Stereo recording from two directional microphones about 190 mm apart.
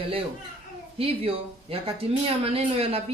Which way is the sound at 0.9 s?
30° right (ahead or behind).